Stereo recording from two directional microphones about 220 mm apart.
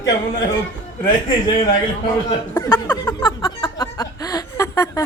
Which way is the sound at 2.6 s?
10° left (ahead or behind).